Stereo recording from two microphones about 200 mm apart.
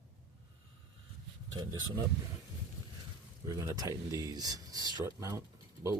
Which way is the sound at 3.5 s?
15° right (ahead or behind).